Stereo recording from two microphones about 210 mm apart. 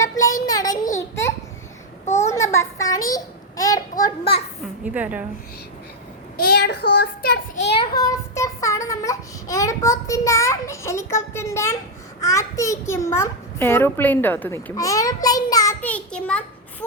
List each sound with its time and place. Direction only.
0.0 s a sound: 15° left (ahead or behind)
2.1 s child singing: 15° left (ahead or behind)
3.6 s a sound: 15° left (ahead or behind)
4.2 s a child's voice: 25° left (ahead or behind)
4.9 s a woman's voice: 5° right (ahead or behind)
6.3 s child singing: 50° left (ahead or behind)
6.9 s a child's voice: 50° left (ahead or behind)
7.8 s a child's voice: 15° left (ahead or behind)